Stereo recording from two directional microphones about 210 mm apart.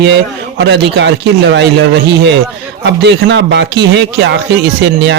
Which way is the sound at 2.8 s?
55° right (ahead or behind).